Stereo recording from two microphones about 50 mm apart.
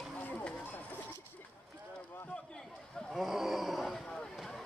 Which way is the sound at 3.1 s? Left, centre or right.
Centre.